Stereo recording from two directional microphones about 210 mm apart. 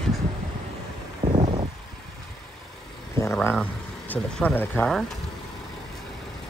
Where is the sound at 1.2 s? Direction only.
20° right (ahead or behind).